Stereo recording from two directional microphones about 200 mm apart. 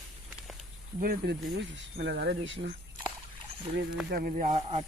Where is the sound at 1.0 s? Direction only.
50° right (ahead or behind); by 2.8 s 65° right (ahead or behind).